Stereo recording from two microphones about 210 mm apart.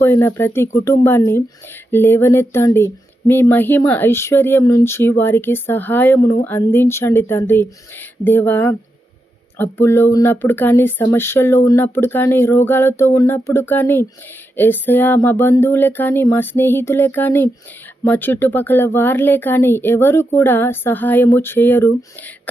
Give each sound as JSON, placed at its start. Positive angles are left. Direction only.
{"t": 0.0, "sound": "speech", "side_deg": 10}